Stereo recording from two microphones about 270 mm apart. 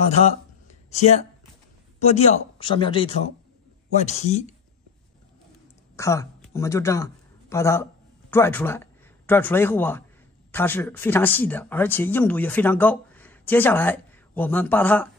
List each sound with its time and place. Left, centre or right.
0.8 s speech: left
5.9 s speech: centre